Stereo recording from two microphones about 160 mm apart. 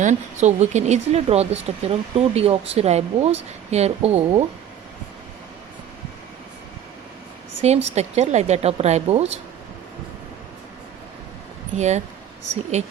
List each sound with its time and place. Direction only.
0.0 s speech: 50° right (ahead or behind)
7.6 s a woman's voice: 45° right (ahead or behind)
11.8 s a woman's voice: 45° right (ahead or behind)